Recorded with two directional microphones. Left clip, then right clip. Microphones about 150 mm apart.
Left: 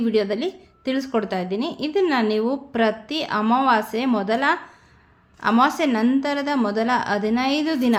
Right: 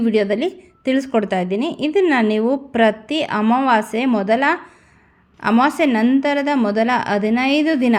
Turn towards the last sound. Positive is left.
turn(degrees=-25)  # may be behind; listen again after turning